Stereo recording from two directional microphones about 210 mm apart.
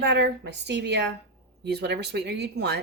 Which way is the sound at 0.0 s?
50° right (ahead or behind).